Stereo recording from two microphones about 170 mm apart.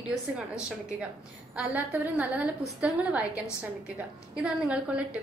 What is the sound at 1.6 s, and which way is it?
A woman's voice, 10° right (ahead or behind).